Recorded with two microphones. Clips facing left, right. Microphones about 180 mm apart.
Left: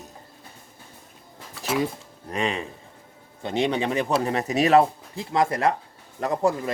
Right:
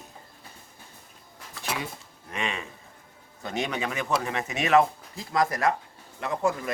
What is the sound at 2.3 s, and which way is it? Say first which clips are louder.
A man's voice: left 6 dB; 35° left (ahead or behind).